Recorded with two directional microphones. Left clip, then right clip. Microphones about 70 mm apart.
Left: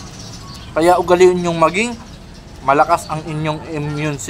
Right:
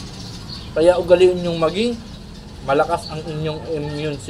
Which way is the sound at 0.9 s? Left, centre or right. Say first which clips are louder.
Left 2 dB; left.